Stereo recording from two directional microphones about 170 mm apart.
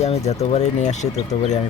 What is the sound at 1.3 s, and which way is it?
Speech, 35° left (ahead or behind).